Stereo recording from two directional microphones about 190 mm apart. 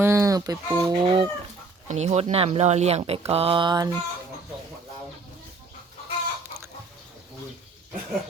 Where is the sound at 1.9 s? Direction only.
35° right (ahead or behind).